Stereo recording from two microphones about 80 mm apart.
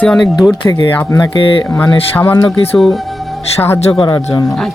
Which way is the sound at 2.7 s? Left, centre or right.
Centre.